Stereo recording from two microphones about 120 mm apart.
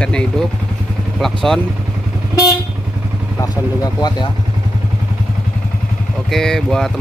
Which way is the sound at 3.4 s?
35° left (ahead or behind).